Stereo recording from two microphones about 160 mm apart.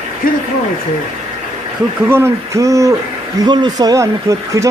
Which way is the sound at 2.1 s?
15° right (ahead or behind).